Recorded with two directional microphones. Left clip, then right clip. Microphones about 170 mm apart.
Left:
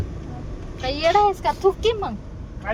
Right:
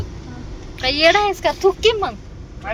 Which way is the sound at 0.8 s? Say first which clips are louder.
Right 4 dB; 5° right (ahead or behind).